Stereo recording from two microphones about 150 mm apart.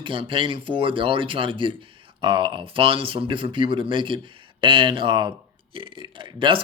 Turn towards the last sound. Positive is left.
turn(degrees=-35)  # may be behind; listen again after turning